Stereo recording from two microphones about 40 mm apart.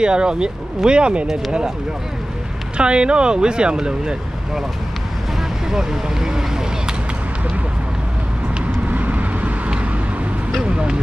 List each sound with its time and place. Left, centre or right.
0.0 s speech: right
2.8 s speech: right
5.7 s speech: centre
8.8 s vehicle: right